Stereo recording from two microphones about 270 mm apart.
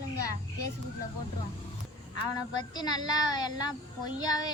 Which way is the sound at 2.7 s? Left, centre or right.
Centre.